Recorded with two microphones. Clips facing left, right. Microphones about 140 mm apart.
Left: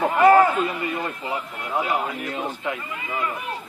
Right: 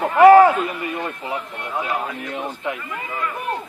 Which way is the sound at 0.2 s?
75° right (ahead or behind).